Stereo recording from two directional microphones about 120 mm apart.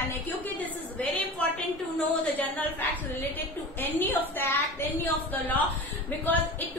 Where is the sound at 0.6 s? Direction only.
10° left (ahead or behind).